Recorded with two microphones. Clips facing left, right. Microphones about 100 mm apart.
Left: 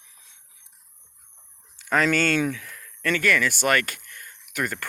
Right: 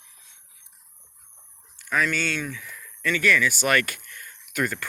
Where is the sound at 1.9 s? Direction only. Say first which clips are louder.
Left 4 dB; 80° left.